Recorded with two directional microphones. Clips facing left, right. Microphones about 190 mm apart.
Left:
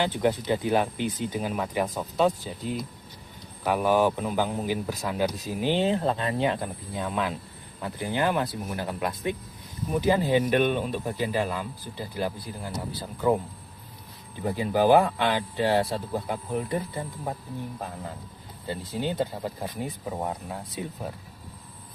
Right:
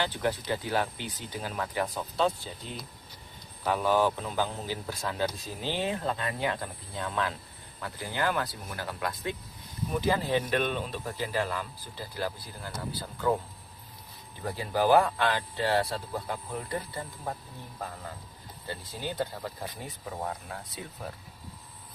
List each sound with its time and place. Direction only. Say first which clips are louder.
0.0 s speech: left 5 dB; 20° left (ahead or behind)
14.4 s speech: left 5 dB; 15° left (ahead or behind)
18.7 s speech: left 7 dB; 20° left (ahead or behind)